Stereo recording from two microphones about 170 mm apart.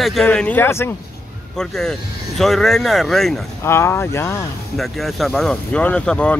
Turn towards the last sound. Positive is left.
turn(degrees=5)  # may be behind; listen again after turning